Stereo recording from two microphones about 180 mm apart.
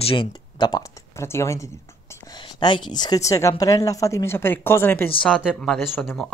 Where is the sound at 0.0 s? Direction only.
30° left (ahead or behind); by 5.1 s 10° left (ahead or behind).